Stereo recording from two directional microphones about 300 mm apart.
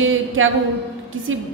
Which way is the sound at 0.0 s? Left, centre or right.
Right.